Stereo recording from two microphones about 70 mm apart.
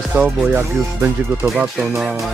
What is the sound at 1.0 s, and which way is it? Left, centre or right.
Speech, right.